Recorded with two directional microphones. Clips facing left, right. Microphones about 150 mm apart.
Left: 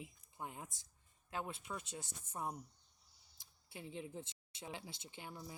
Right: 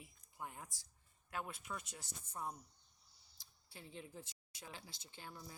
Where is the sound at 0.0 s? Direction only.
20° left (ahead or behind).